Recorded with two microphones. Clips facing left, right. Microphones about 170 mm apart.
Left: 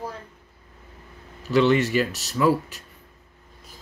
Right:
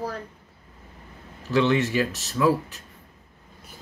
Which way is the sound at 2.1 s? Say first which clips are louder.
Left 1 dB; 70° left (ahead or behind).